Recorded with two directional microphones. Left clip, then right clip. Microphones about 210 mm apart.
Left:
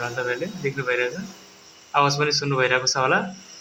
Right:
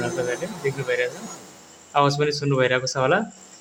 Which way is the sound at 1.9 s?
20° right (ahead or behind).